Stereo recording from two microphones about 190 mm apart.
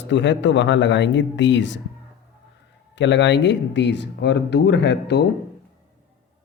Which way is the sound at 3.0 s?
70° left (ahead or behind).